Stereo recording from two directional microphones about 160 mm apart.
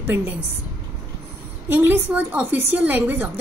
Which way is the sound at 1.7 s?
10° right (ahead or behind).